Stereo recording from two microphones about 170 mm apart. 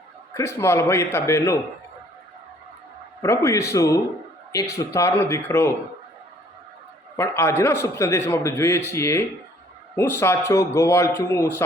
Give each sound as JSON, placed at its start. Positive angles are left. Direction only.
{"t": 0.3, "sound": "a man's voice", "side_deg": 15}
{"t": 3.2, "sound": "a man's voice", "side_deg": 15}
{"t": 7.2, "sound": "a man's voice", "side_deg": 15}